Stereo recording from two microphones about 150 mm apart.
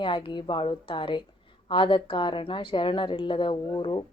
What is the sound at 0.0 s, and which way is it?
A woman's voice, 35° left (ahead or behind).